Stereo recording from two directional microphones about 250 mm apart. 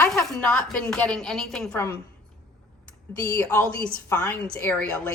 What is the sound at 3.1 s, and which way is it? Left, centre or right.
A woman's voice, centre.